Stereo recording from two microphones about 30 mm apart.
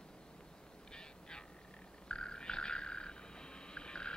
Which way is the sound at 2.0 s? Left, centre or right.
Left.